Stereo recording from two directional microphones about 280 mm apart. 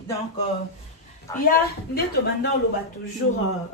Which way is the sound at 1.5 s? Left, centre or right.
Left.